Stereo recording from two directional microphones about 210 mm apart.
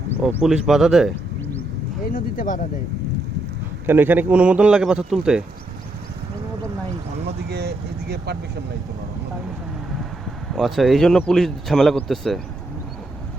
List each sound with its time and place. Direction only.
0.3 s speech: centre (ahead or behind)
2.1 s speech: 40° left (ahead or behind)
3.8 s speech: 10° right (ahead or behind)
7.5 s vehicle: 50° right (ahead or behind)
10.5 s speech: centre (ahead or behind)